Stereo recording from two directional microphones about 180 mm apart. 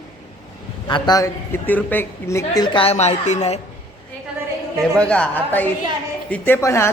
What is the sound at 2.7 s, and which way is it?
Speech, 35° left (ahead or behind).